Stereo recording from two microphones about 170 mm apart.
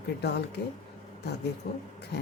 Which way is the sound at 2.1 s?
80° left.